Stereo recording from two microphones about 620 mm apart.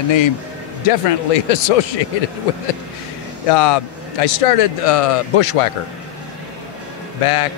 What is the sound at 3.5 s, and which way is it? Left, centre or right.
A man's voice, left.